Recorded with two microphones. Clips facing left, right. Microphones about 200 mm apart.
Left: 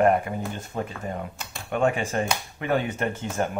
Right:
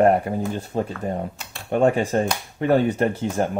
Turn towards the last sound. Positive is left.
turn(degrees=-35)  # may be behind; listen again after turning